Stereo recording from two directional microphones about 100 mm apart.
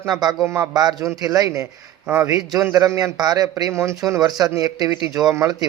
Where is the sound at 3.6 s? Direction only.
30° right (ahead or behind).